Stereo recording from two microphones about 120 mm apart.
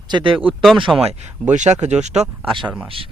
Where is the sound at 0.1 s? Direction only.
40° right (ahead or behind).